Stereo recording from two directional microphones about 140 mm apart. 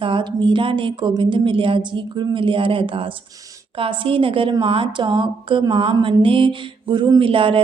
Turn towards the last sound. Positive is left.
turn(degrees=-40)  # may be behind; listen again after turning